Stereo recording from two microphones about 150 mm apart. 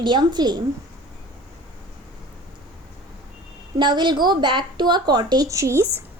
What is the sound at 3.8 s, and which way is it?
A woman's voice, 30° right (ahead or behind).